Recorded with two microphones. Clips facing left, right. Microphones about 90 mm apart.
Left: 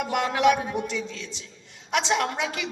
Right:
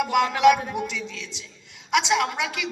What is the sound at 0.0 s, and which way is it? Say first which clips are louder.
Speech: right 4 dB; 30° left (ahead or behind).